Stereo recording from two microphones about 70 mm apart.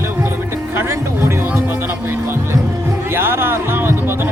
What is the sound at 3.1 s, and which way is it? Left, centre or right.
Speech, right.